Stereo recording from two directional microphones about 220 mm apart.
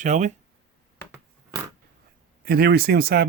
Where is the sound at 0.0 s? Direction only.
35° right (ahead or behind).